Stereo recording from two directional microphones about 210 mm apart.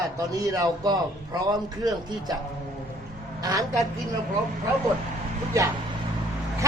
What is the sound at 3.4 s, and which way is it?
Speech, 15° right (ahead or behind).